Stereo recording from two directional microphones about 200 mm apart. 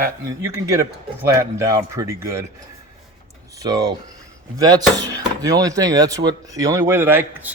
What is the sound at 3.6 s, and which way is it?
A man's voice, 20° right (ahead or behind).